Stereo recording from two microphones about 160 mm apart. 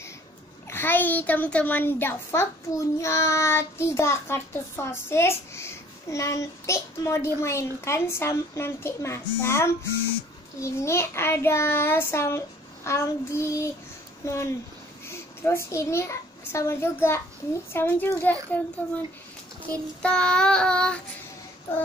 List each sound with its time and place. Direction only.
0.7 s a child's voice: 15° left (ahead or behind)
20.0 s child singing: 5° left (ahead or behind)